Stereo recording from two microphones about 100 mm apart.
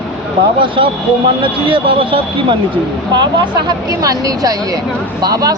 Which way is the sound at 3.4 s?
45° right (ahead or behind).